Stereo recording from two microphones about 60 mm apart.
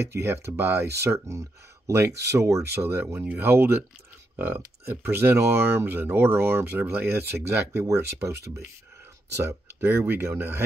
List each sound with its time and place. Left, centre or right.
0.0 s speech: right
1.0 s speech: right
1.9 s speech: right
6.6 s speech: right